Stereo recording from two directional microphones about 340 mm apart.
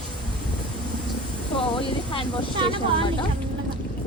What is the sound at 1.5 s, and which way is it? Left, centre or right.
Speech, centre.